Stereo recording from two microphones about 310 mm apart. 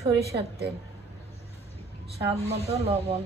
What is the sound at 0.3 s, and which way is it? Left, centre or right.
Speech, right.